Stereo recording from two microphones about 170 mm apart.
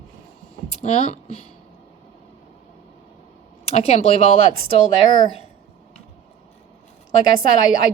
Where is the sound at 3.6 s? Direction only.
40° left (ahead or behind).